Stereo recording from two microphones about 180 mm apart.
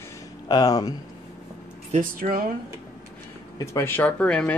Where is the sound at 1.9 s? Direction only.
45° right (ahead or behind).